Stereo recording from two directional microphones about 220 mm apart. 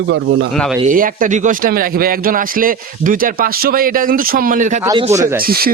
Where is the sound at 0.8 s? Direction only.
40° right (ahead or behind).